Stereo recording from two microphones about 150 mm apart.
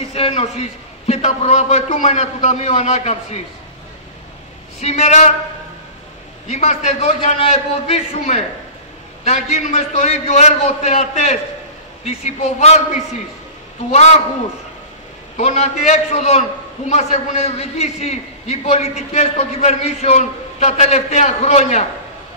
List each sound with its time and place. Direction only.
0.1 s a man's voice: 40° left (ahead or behind)
4.7 s a man's voice: 50° left (ahead or behind)
6.5 s a man's voice: 50° left (ahead or behind)
15.3 s a man's voice: 45° left (ahead or behind)